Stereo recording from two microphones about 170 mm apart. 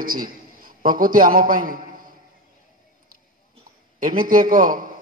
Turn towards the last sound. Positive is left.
turn(degrees=-55)  # may be behind; listen again after turning